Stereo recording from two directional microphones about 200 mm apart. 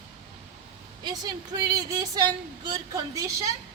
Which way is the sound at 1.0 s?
20° right (ahead or behind).